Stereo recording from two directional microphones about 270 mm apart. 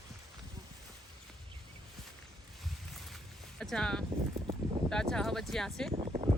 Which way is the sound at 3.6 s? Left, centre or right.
Centre.